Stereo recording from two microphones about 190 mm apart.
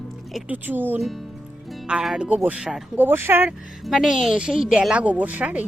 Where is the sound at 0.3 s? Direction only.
10° right (ahead or behind).